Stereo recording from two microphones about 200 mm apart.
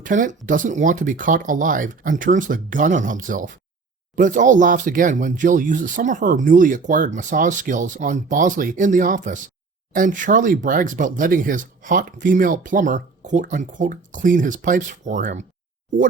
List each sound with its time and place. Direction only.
0.0 s speech: 40° right (ahead or behind)